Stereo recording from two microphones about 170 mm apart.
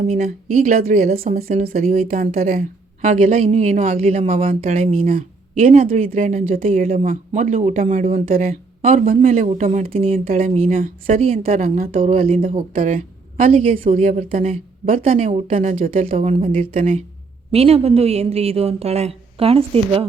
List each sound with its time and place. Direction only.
0.0 s a woman's voice: 50° right (ahead or behind)
2.0 s a woman's voice: 55° right (ahead or behind); by 5.1 s 35° right (ahead or behind)
5.1 s a woman's voice: 50° right (ahead or behind)
11.4 s speech: 50° right (ahead or behind)
11.9 s a woman's voice: 35° right (ahead or behind)
13.6 s a woman's voice: 35° right (ahead or behind); by 16.0 s 55° right (ahead or behind)
16.0 s a woman's voice: 35° right (ahead or behind)
16.7 s a woman's voice: 45° right (ahead or behind)